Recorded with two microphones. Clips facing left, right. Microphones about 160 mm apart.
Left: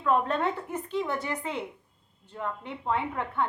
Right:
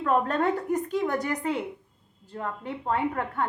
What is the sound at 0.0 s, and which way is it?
A woman's voice, 40° right (ahead or behind).